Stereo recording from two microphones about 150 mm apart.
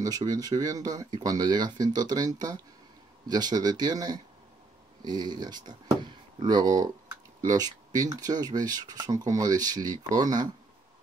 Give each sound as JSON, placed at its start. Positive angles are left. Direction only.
{"t": 0.0, "sound": "speech", "side_deg": -25}